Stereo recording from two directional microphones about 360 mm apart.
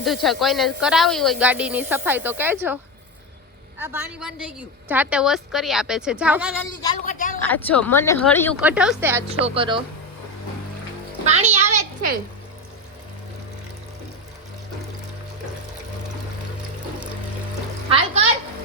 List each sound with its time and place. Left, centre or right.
0.0 s a woman's voice: centre
3.8 s a woman's voice: centre
6.8 s a sound: left
7.4 s a woman's voice: centre
11.3 s speech: centre
17.8 s a child's voice: centre